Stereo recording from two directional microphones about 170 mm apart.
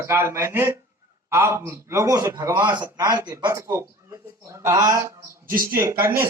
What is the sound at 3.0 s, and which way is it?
Speech, 20° right (ahead or behind).